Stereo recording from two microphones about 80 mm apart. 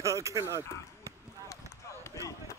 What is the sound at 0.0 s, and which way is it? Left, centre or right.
Speech, right.